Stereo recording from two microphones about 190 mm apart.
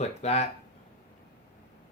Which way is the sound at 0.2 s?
35° left (ahead or behind).